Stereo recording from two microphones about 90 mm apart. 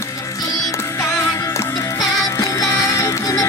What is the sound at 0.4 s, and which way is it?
Music, 45° left (ahead or behind).